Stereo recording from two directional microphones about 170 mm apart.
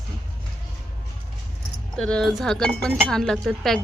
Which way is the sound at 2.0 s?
5° left (ahead or behind).